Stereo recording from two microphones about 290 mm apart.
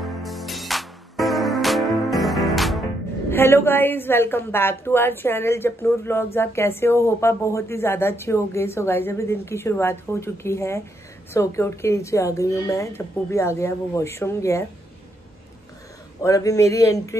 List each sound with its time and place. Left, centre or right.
0.2 s music: centre
3.3 s a woman's voice: centre
16.2 s a woman's voice: centre